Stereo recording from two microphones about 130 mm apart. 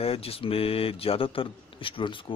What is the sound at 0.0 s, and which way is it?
A man's voice, 50° left (ahead or behind).